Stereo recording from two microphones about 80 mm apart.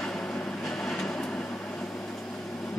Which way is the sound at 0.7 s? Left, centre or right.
Centre.